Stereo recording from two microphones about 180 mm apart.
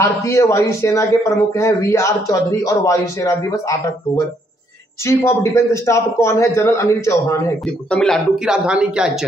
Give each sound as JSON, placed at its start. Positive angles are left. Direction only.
{"t": 0.0, "sound": "a man's voice", "side_deg": 15}
{"t": 7.6, "sound": "speech", "side_deg": 5}